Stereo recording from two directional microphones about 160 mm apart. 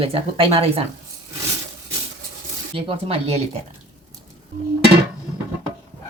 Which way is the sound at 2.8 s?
35° right (ahead or behind).